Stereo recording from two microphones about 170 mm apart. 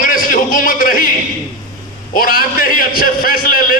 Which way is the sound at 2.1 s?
60° left (ahead or behind).